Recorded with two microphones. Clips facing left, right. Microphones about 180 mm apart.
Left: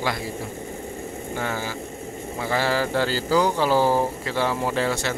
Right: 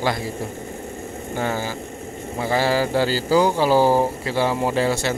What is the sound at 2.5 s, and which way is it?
Speech, 10° right (ahead or behind).